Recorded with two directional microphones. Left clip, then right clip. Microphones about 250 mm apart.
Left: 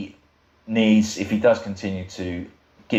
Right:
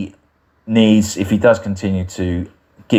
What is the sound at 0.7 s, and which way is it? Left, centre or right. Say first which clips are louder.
Speech: right 6 dB; right.